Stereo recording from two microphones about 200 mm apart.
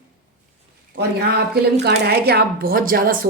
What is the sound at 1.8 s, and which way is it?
A woman's voice, 55° right (ahead or behind).